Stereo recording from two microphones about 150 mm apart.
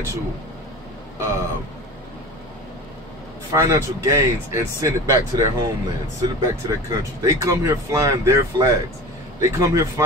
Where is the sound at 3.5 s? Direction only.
20° right (ahead or behind).